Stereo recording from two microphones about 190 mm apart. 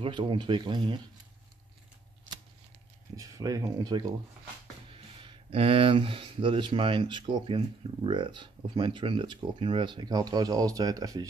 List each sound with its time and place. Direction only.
0.0 s speech: 25° right (ahead or behind)
3.2 s speech: 20° right (ahead or behind)
5.2 s speech: 30° right (ahead or behind)